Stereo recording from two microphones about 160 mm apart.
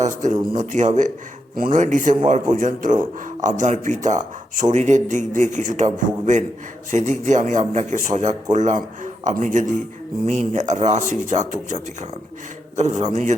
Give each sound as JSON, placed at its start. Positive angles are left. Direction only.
{"t": 0.0, "sound": "a man's voice", "side_deg": -50}